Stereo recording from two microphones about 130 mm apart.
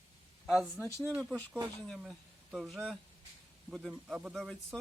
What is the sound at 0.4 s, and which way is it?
Speech, centre (ahead or behind).